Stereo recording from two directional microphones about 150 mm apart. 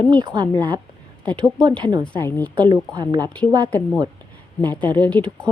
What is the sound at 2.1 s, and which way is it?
Speech, 10° left (ahead or behind).